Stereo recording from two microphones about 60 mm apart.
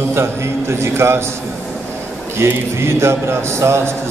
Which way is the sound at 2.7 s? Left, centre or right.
Right.